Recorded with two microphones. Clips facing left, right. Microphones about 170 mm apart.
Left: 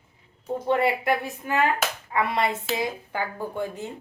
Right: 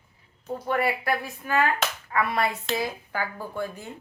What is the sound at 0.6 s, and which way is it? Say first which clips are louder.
A woman's voice: left 3 dB; 25° left (ahead or behind).